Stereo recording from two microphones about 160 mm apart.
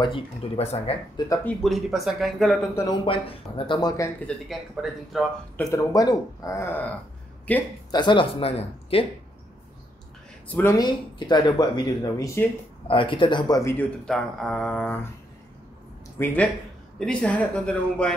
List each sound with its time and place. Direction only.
0.0 s speech: 35° left (ahead or behind)
1.4 s speech: 5° left (ahead or behind)
2.7 s speech: 20° left (ahead or behind)
3.1 s speech: 35° left (ahead or behind)
4.8 s speech: 5° right (ahead or behind)
5.7 s speech: 20° left (ahead or behind)
7.9 s speech: 30° left (ahead or behind)
10.5 s speech: 15° left (ahead or behind)
14.0 s speech: 5° left (ahead or behind)
16.2 s speech: 15° left (ahead or behind)